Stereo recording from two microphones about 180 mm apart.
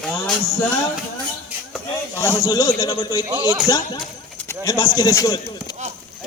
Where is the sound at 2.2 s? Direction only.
15° left (ahead or behind).